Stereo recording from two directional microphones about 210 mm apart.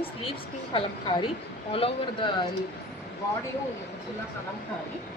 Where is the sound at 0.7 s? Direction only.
25° left (ahead or behind).